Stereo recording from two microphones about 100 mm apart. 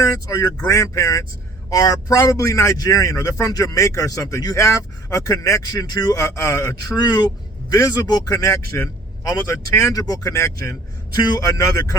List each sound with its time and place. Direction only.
0.0 s speech: 35° left (ahead or behind)